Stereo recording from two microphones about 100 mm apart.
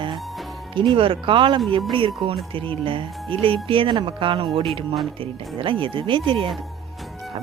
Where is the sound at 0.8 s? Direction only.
60° right (ahead or behind).